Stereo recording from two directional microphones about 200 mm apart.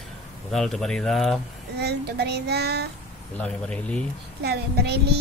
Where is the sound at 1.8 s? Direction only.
55° right (ahead or behind).